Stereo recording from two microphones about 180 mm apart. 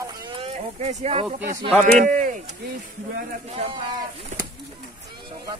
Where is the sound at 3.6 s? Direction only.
30° right (ahead or behind).